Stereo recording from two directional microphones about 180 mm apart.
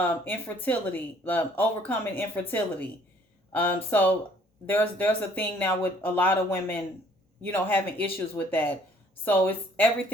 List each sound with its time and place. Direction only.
0.3 s speech: 10° left (ahead or behind)